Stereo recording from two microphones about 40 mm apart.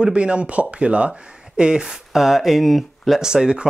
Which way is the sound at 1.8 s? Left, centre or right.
Centre.